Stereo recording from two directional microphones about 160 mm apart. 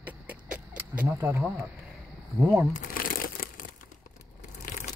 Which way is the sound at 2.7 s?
65° left (ahead or behind).